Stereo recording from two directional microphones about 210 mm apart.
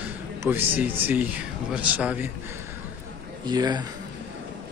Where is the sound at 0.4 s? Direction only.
10° right (ahead or behind).